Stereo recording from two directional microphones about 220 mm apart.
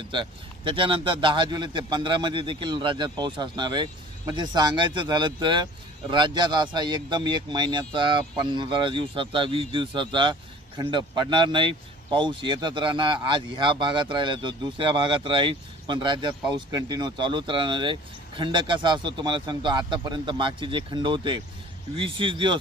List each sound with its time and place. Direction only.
0.1 s speech: 20° right (ahead or behind)